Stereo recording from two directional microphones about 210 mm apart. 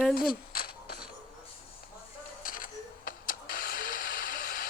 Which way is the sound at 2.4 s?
40° left (ahead or behind).